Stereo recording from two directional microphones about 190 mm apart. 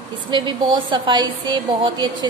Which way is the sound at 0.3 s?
25° right (ahead or behind).